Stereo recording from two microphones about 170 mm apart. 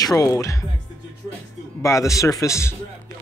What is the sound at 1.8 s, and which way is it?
Speech, 20° left (ahead or behind).